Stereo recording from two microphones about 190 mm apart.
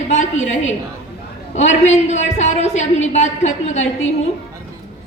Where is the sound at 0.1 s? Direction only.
40° left (ahead or behind).